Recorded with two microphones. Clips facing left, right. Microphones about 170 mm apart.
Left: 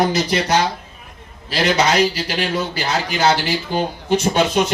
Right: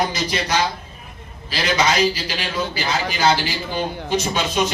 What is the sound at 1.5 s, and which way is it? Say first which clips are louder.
Speech: left 3 dB; 65° left (ahead or behind).